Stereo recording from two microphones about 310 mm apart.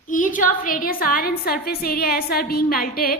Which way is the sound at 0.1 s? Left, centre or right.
Left.